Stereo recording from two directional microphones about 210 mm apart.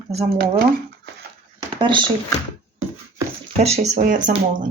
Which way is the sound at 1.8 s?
25° right (ahead or behind).